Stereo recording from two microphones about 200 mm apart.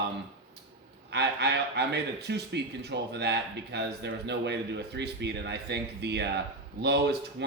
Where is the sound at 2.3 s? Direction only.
55° right (ahead or behind).